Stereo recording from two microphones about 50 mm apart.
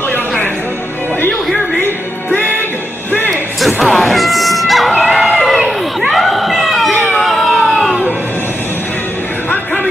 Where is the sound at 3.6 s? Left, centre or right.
Centre.